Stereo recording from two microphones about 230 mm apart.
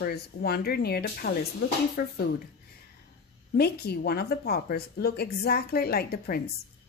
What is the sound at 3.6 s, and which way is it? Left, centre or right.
Speech, left.